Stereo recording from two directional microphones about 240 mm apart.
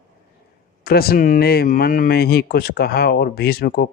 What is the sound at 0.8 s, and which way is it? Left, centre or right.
Speech, left.